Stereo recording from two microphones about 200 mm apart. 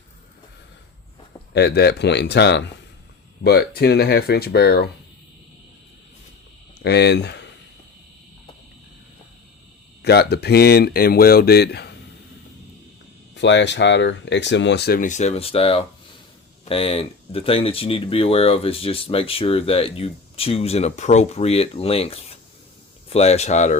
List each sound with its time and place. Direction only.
1.5 s speech: 55° left (ahead or behind)
6.7 s speech: 55° left (ahead or behind)
10.0 s speech: 55° left (ahead or behind)
13.3 s speech: 60° left (ahead or behind); by 23.7 s 35° left (ahead or behind)